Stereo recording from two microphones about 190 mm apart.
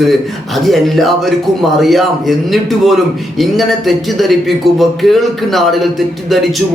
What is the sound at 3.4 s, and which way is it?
Speech, centre (ahead or behind).